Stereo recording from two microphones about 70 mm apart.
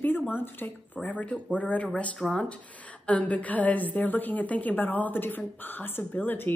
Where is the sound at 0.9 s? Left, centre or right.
Centre.